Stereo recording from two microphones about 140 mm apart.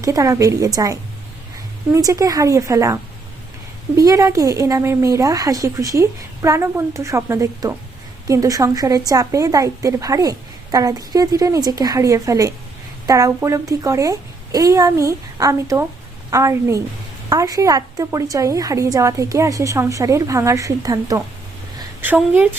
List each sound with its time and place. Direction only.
0.0 s a woman's voice: 25° right (ahead or behind)
22.0 s speech: 15° right (ahead or behind)